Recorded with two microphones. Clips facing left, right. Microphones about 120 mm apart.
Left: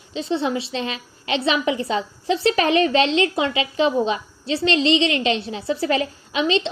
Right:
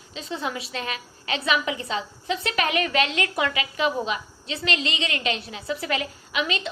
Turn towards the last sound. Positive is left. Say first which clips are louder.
# left 7 dB
turn(degrees=30)  # may be behind; listen again after turning